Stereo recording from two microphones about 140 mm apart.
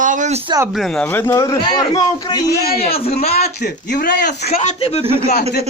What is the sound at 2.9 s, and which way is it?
Speech, 45° left (ahead or behind).